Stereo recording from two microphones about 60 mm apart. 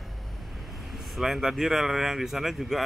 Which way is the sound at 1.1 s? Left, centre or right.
Centre.